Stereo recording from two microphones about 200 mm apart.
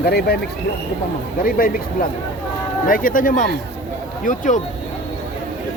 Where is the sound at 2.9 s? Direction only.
45° left (ahead or behind).